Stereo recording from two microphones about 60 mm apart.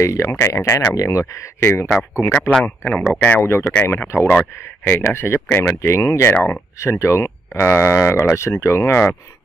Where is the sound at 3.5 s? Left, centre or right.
Left.